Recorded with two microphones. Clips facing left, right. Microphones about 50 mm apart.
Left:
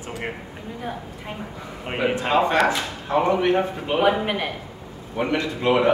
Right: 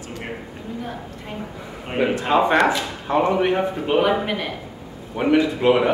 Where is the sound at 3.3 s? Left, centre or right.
Centre.